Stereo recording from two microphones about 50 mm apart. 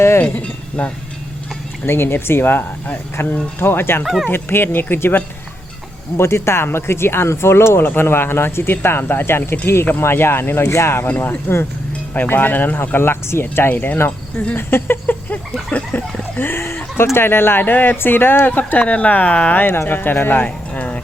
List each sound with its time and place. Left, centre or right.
0.2 s speech: left
1.9 s speech: left
4.0 s speech: centre
4.3 s speech: left
6.1 s speech: left
10.6 s speech: left
11.5 s speech: left
13.7 s speech: left
15.7 s a sound: left
16.4 s speech: left
17.6 s speech: left
18.8 s speech: left